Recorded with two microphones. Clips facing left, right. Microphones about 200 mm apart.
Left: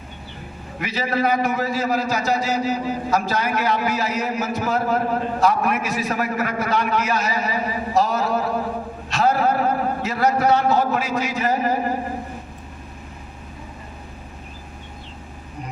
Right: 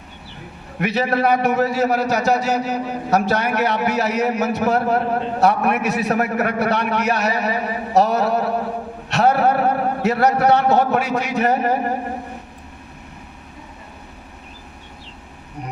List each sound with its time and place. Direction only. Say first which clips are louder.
0.8 s a man's voice: right 4 dB; 65° right (ahead or behind)